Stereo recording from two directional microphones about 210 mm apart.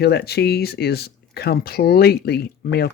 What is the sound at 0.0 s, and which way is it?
Speech, 50° left (ahead or behind).